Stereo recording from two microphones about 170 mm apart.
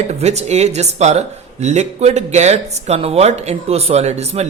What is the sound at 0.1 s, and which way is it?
Speech, 40° right (ahead or behind).